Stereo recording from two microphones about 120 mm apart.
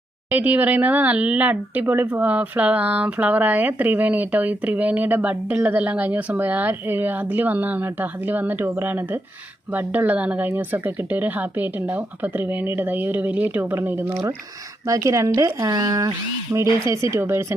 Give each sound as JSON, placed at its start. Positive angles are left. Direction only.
{"t": 0.3, "sound": "speech", "side_deg": -15}